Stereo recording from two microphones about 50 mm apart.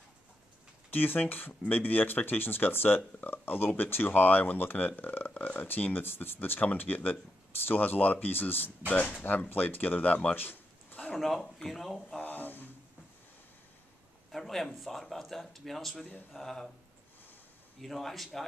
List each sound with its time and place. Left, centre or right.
0.8 s speech: left
6.6 s speech: left
8.9 s speech: left
9.5 s speech: left
10.3 s a sound: left
11.1 s speech: centre
12.2 s a sound: left
14.3 s speech: centre
17.8 s speech: centre